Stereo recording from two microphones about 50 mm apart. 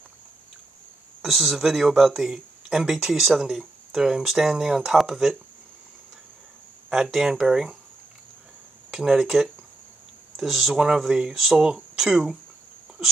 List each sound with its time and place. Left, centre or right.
1.2 s speech: centre
6.9 s speech: centre
8.9 s speech: centre
11.3 s speech: centre
11.6 s speech: centre